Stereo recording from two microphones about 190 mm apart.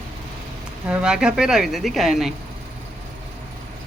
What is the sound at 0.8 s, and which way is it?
A woman's voice, 5° right (ahead or behind).